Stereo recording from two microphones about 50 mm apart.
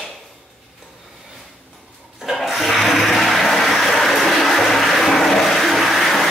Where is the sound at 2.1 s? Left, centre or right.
Centre.